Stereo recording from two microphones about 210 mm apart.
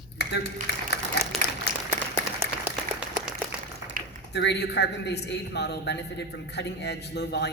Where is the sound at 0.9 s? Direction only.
50° left (ahead or behind).